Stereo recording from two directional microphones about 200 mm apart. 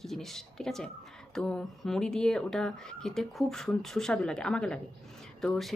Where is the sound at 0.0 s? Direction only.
Centre (ahead or behind).